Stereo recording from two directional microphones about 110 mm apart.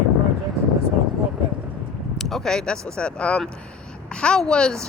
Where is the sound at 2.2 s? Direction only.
5° left (ahead or behind).